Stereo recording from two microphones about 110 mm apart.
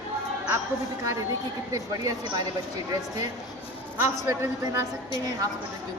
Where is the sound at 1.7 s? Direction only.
35° right (ahead or behind).